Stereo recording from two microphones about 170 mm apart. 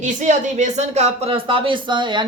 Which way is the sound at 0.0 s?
45° right (ahead or behind).